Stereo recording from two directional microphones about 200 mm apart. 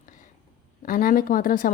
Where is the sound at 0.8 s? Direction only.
45° left (ahead or behind).